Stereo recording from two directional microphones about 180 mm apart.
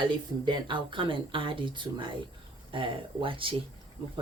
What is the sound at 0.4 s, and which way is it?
Speech, 25° right (ahead or behind).